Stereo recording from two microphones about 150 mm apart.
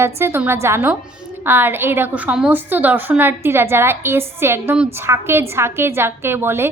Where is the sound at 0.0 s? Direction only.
15° right (ahead or behind).